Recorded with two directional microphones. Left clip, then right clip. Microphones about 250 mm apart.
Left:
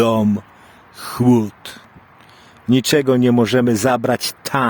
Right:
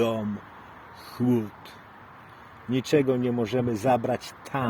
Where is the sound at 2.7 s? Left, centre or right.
Left.